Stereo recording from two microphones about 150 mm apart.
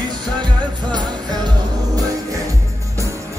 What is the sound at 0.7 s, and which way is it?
Music, 30° right (ahead or behind).